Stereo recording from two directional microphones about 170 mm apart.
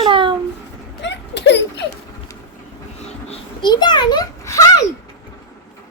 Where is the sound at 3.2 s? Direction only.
25° left (ahead or behind).